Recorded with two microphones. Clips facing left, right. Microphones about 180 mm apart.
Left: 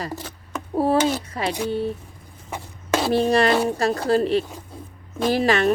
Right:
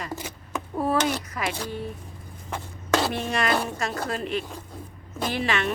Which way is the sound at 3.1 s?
35° left (ahead or behind).